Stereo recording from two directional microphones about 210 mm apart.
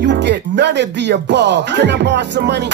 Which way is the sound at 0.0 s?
55° right (ahead or behind).